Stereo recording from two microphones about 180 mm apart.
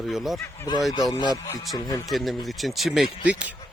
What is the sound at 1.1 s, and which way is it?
Speech, 20° left (ahead or behind).